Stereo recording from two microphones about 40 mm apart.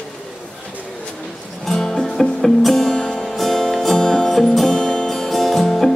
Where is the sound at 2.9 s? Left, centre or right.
Centre.